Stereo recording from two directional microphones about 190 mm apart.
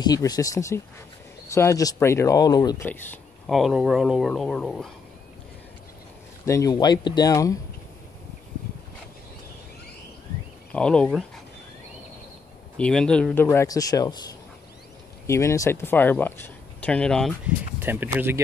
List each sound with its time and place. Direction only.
0.0 s speech: 20° left (ahead or behind)
3.4 s speech: centre (ahead or behind)
6.4 s speech: 15° left (ahead or behind)
10.7 s speech: 5° left (ahead or behind)
12.7 s speech: 5° left (ahead or behind)
15.2 s speech: 15° left (ahead or behind)
17.5 s speech: 10° right (ahead or behind)